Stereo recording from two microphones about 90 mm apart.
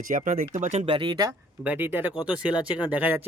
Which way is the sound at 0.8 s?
75° right (ahead or behind).